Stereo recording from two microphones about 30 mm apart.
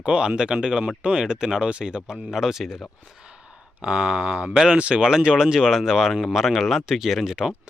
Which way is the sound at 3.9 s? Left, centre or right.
Right.